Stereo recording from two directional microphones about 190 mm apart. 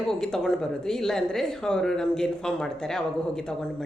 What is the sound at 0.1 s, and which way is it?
Speech, 5° left (ahead or behind).